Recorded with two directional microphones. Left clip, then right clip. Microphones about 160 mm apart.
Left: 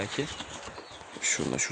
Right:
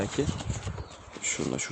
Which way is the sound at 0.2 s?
45° right (ahead or behind).